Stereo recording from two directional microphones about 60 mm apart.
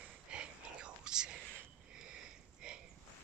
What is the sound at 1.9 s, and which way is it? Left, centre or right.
Sniff, centre.